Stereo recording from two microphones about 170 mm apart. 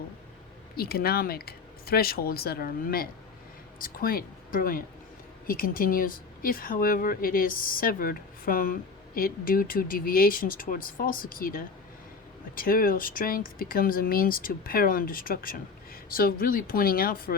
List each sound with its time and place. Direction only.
0.8 s speech: 65° left (ahead or behind)